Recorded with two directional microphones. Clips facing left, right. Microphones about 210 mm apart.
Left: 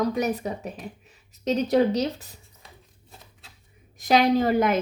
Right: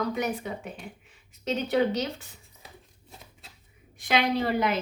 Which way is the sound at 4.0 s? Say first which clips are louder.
Left 6 dB; 40° left (ahead or behind).